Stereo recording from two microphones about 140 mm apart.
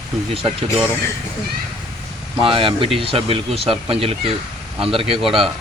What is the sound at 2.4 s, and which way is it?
Speech, 40° right (ahead or behind).